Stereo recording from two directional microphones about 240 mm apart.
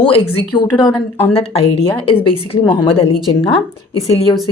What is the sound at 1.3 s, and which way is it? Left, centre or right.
Speech, left.